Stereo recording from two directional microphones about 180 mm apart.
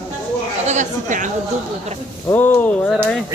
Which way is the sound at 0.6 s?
45° right (ahead or behind).